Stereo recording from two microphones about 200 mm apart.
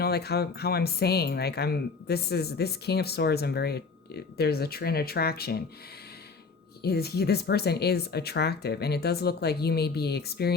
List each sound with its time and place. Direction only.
0.0 s speech: 55° left (ahead or behind)
6.8 s speech: 50° left (ahead or behind)